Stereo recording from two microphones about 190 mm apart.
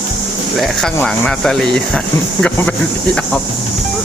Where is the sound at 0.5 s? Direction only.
Centre (ahead or behind).